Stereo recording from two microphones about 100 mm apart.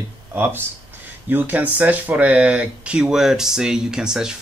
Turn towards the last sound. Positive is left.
turn(degrees=-5)  # may be behind; listen again after turning